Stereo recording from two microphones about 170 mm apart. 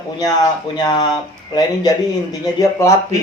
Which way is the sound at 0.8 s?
25° left (ahead or behind).